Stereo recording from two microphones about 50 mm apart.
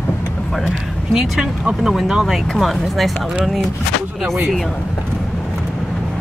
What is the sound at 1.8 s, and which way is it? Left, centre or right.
Speech, centre.